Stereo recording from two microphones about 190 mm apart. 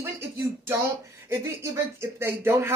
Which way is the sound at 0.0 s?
10° right (ahead or behind).